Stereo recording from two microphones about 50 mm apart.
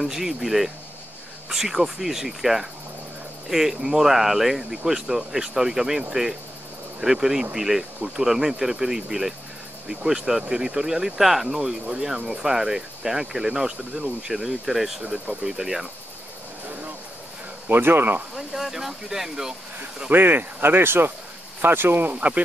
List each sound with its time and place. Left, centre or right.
0.0 s speech: centre
17.6 s speech: right
18.3 s speech: centre
20.1 s speech: right
22.1 s speech: right